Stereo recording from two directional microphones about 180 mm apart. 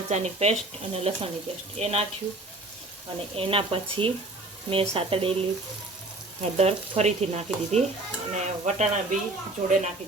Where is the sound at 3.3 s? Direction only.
30° right (ahead or behind).